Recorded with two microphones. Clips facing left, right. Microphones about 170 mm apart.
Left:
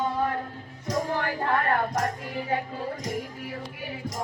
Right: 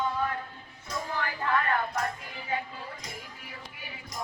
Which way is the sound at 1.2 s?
40° left (ahead or behind).